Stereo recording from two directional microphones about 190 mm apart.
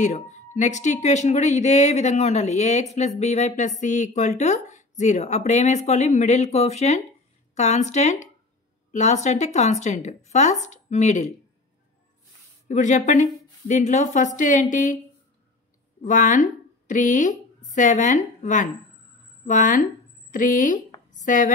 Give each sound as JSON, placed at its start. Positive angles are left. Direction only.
{"t": 0.0, "sound": "speech", "side_deg": 40}
{"t": 12.6, "sound": "speech", "side_deg": 40}
{"t": 16.0, "sound": "a woman's voice", "side_deg": 40}
{"t": 21.1, "sound": "a sound", "side_deg": 45}